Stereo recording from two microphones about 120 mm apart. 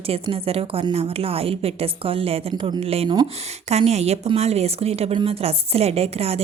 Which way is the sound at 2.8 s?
55° right (ahead or behind).